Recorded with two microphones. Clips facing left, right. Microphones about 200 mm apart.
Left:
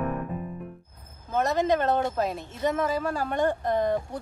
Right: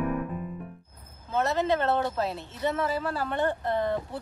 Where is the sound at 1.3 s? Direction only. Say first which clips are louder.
Left 2 dB; 15° left (ahead or behind).